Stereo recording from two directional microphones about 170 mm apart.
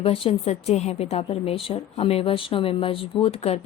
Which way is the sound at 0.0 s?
35° left (ahead or behind).